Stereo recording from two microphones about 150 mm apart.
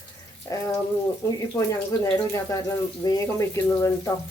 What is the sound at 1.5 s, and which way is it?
Speech, 20° left (ahead or behind).